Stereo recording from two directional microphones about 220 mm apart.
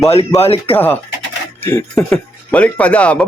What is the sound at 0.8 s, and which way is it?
Speech, 10° left (ahead or behind).